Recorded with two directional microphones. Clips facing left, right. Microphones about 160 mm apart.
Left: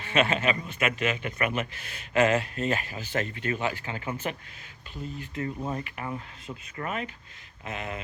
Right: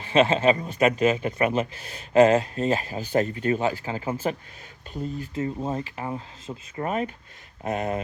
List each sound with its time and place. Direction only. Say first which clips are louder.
0.0 s speech: right 6 dB; 30° right (ahead or behind)